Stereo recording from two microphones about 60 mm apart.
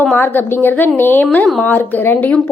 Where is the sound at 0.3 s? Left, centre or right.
Left.